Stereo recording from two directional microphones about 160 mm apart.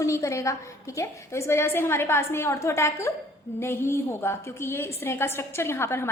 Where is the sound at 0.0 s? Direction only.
20° left (ahead or behind).